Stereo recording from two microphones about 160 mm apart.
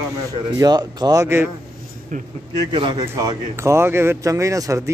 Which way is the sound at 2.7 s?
30° right (ahead or behind).